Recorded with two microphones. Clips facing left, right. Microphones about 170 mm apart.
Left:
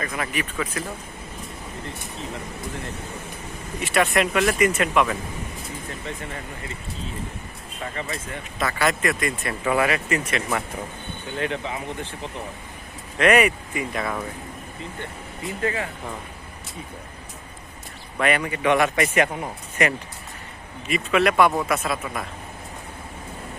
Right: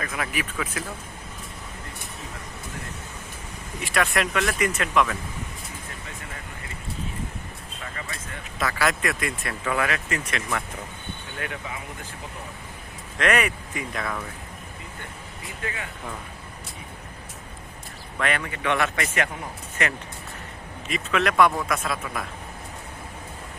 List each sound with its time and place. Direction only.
0.0 s speech: centre (ahead or behind)
3.8 s speech: centre (ahead or behind)
7.9 s speech: 25° left (ahead or behind)
8.5 s speech: centre (ahead or behind)
9.6 s speech: 10° left (ahead or behind)
11.3 s speech: 25° left (ahead or behind)
13.1 s speech: 10° left (ahead or behind)
15.6 s speech: 35° left (ahead or behind)
18.2 s speech: 10° left (ahead or behind)